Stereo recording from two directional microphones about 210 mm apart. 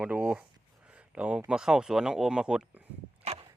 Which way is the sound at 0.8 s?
5° right (ahead or behind).